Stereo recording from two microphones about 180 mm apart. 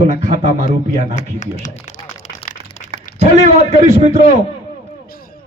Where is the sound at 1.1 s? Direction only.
45° left (ahead or behind).